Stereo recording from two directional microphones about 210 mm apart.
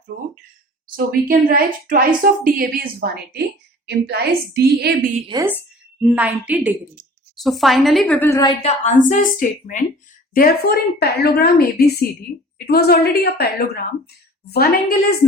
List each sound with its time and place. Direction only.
0.1 s a woman's voice: 50° right (ahead or behind)
5.3 s a woman's voice: 10° right (ahead or behind); by 8.5 s 15° left (ahead or behind)
8.6 s a woman's voice: 35° left (ahead or behind)